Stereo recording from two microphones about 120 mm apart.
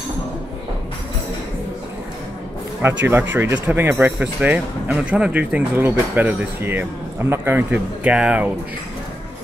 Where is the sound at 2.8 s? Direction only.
20° right (ahead or behind).